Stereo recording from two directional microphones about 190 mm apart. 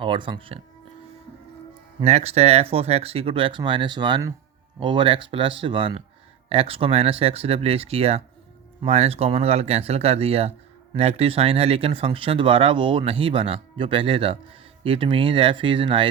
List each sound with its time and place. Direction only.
0.0 s speech: 25° right (ahead or behind)
2.0 s speech: 35° right (ahead or behind)